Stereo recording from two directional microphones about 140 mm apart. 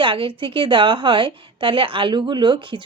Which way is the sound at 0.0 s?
40° right (ahead or behind).